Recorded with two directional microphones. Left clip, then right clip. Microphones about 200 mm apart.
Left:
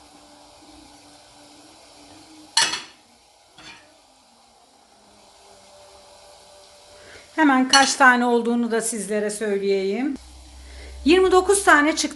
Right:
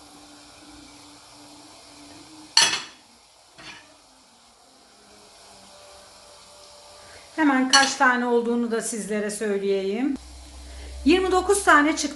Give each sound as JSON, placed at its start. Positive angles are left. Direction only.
{"t": 7.3, "sound": "speech", "side_deg": 55}